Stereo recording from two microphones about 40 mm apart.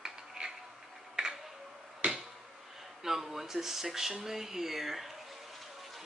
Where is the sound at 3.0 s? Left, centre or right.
Centre.